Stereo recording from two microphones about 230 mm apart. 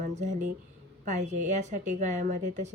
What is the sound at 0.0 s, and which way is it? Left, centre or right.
A woman's voice, right.